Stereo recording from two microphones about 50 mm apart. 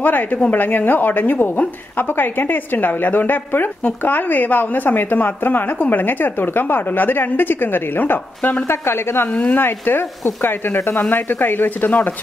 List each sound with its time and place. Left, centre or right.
0.0 s a woman's voice: left
8.6 s speech: left
9.3 s speech: left
9.6 s speech: left
11.1 s speech: left